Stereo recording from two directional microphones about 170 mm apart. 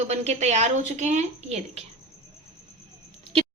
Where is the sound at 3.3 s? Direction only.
35° right (ahead or behind).